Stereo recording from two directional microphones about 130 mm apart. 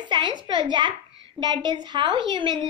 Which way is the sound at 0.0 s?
35° right (ahead or behind).